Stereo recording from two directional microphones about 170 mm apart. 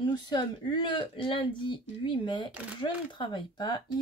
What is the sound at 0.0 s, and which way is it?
Speech, 25° left (ahead or behind).